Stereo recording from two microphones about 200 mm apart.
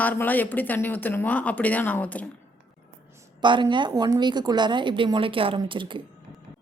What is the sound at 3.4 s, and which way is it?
A woman's voice, 25° right (ahead or behind).